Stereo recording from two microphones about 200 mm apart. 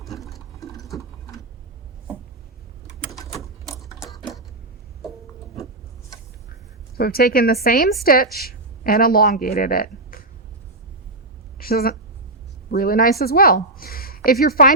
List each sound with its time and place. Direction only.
6.9 s a woman's voice: 50° left (ahead or behind)
11.5 s a woman's voice: 50° left (ahead or behind)